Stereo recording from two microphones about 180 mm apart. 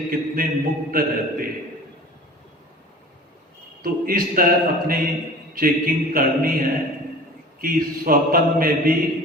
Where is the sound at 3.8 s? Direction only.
55° right (ahead or behind).